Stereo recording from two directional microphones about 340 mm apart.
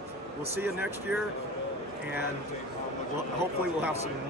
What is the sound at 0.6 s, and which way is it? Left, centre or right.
Speech, centre.